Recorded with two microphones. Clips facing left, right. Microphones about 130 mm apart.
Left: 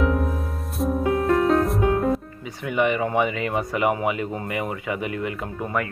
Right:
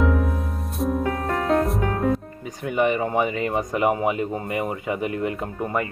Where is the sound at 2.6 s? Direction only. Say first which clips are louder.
Even; 35° right (ahead or behind).